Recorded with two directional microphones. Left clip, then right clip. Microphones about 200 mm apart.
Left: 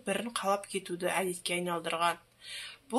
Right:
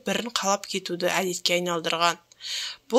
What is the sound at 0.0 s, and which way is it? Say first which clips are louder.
Speech: right 6 dB; 30° right (ahead or behind).